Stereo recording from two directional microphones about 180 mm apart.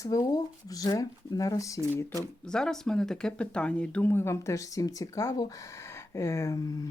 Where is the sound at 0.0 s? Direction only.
20° left (ahead or behind).